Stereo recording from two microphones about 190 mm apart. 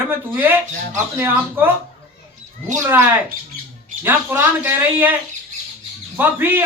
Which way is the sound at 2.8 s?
10° right (ahead or behind).